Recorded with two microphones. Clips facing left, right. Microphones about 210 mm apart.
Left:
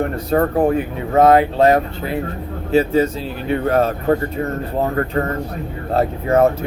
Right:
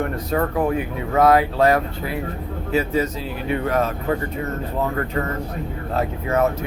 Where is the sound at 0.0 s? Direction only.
40° left (ahead or behind).